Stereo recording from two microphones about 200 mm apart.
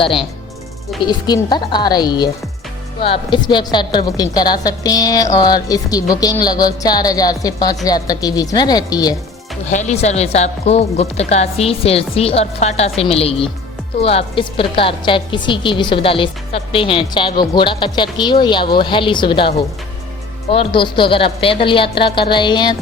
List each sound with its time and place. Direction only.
1.0 s a woman's voice: 20° left (ahead or behind)
9.6 s a woman's voice: 35° left (ahead or behind)